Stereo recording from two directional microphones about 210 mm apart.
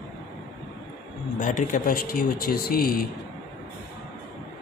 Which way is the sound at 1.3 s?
40° left (ahead or behind).